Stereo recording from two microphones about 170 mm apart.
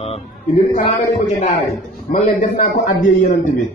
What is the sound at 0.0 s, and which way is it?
Speech, 35° left (ahead or behind).